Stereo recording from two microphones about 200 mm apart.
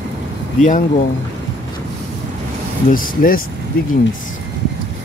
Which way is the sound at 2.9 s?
45° left (ahead or behind).